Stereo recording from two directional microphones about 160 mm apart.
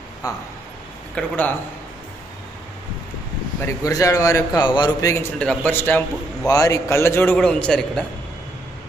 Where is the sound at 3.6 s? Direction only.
20° left (ahead or behind).